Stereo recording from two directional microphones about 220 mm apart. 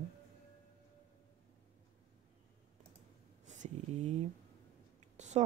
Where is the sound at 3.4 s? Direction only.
35° right (ahead or behind).